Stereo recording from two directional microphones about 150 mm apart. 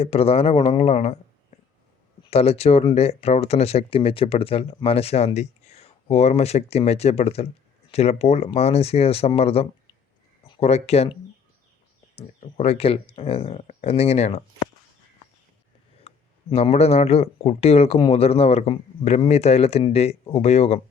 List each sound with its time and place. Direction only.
0.0 s speech: 40° left (ahead or behind)
12.1 s speech: 45° left (ahead or behind)
16.0 s speech: 40° left (ahead or behind)